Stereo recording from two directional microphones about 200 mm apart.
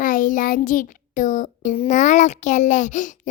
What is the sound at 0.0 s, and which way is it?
Child singing, 45° left (ahead or behind).